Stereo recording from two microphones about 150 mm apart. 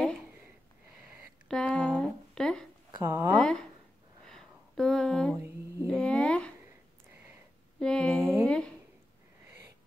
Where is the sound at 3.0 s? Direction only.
15° right (ahead or behind).